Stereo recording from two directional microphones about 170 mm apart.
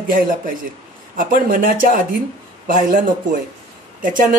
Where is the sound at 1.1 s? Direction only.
55° right (ahead or behind).